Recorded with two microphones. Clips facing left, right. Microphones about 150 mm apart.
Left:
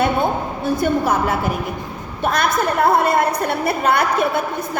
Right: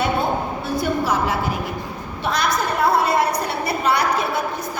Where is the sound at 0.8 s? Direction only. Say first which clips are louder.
Left 2 dB; 55° left (ahead or behind).